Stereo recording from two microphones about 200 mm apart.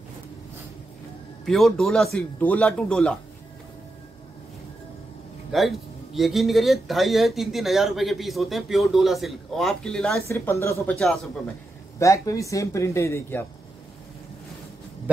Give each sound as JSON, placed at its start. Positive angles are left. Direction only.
{"t": 1.4, "sound": "speech", "side_deg": 0}
{"t": 5.5, "sound": "speech", "side_deg": 0}
{"t": 10.2, "sound": "speech", "side_deg": 15}
{"t": 12.0, "sound": "speech", "side_deg": 15}